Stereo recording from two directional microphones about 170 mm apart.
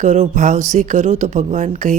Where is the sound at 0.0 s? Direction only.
45° right (ahead or behind).